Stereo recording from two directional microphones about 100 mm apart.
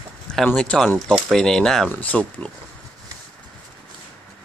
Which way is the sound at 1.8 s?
15° left (ahead or behind).